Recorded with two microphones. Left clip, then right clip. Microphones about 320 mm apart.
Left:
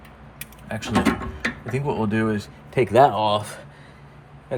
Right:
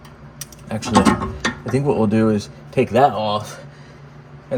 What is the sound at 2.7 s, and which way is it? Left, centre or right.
Speech, left.